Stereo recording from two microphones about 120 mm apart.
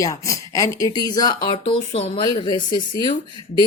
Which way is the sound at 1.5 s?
50° left (ahead or behind).